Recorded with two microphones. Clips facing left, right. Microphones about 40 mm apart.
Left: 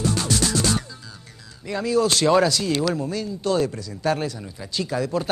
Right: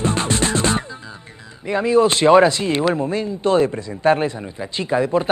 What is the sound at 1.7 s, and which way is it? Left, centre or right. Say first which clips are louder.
Speech: right 6 dB; right.